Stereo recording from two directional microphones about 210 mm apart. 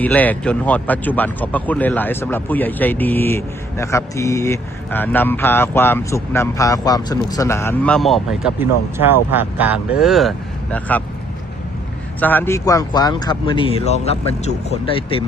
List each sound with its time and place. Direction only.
0.0 s speech: 10° left (ahead or behind)
12.2 s speech: 10° left (ahead or behind); by 15.2 s 30° left (ahead or behind)